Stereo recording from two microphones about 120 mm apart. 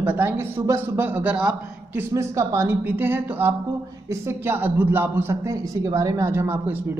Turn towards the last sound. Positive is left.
turn(degrees=-15)  # may be behind; listen again after turning